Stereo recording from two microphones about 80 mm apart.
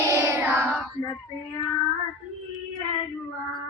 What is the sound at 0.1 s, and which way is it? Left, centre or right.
Child singing, right.